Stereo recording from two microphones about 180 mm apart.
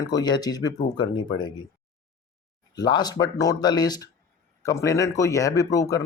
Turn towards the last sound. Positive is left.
turn(degrees=20)  # may be behind; listen again after turning